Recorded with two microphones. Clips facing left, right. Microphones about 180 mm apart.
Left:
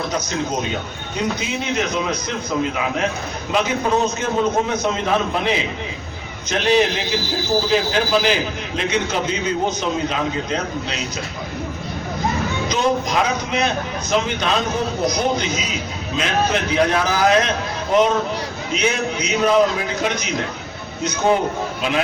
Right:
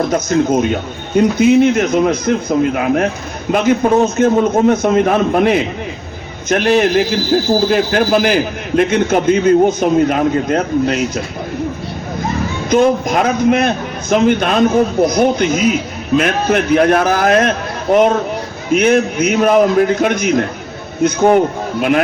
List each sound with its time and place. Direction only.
0.1 s a man's voice: 50° right (ahead or behind)
12.7 s a man's voice: 55° right (ahead or behind)